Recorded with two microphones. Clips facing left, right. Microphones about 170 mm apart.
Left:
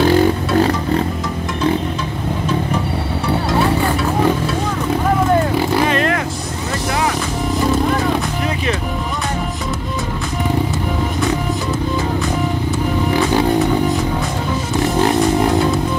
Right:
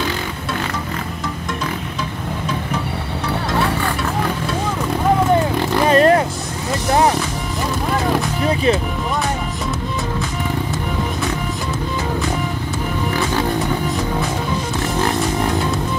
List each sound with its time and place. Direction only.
0.6 s music: 35° left (ahead or behind)
5.9 s zipper: 35° right (ahead or behind)
6.9 s music: 40° right (ahead or behind)